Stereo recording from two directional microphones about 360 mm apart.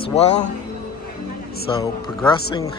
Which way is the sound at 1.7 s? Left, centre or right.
Centre.